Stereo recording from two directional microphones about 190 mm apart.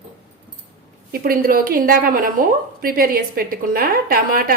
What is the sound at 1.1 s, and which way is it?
A woman's voice, 50° right (ahead or behind).